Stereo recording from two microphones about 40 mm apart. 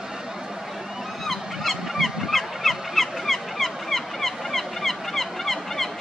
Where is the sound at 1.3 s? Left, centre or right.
Centre.